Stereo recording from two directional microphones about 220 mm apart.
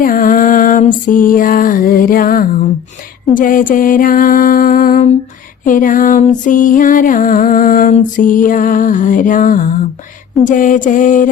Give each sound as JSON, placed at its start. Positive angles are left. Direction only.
{"t": 0.0, "sound": "lullaby", "side_deg": 40}
{"t": 3.3, "sound": "music", "side_deg": 35}